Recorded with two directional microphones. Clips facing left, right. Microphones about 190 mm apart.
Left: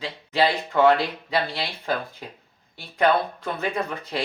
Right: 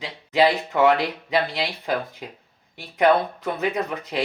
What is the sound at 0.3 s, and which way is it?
Speech, 15° right (ahead or behind).